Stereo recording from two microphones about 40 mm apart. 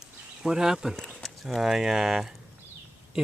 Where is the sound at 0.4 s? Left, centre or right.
Centre.